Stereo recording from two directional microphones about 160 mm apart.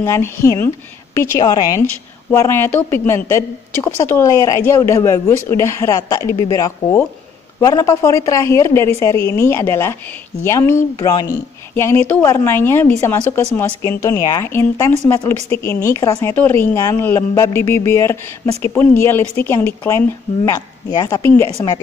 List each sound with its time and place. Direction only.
0.0 s a woman's voice: 15° left (ahead or behind)